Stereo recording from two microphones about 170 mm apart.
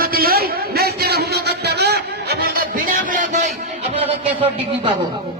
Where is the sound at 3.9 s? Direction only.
35° right (ahead or behind).